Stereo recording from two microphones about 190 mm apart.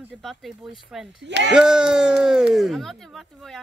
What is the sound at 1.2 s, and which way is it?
Speech, 65° right (ahead or behind).